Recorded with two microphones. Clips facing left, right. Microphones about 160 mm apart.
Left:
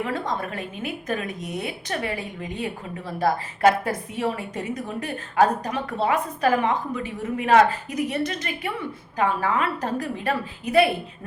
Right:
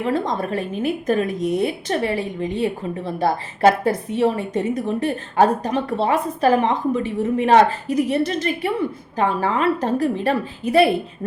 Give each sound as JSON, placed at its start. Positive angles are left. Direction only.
{"t": 0.0, "sound": "a woman's voice", "side_deg": -30}